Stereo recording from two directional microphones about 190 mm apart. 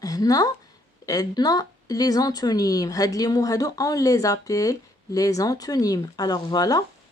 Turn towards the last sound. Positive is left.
turn(degrees=20)  # may be behind; listen again after turning